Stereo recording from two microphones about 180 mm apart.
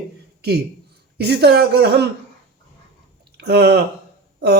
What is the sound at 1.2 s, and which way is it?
Speech, 65° right (ahead or behind).